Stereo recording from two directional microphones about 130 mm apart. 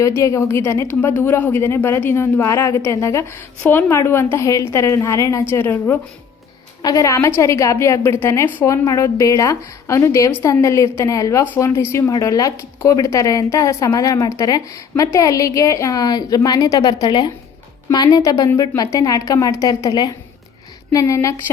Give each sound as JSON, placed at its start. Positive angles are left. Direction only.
{"t": 0.0, "sound": "speech", "side_deg": 25}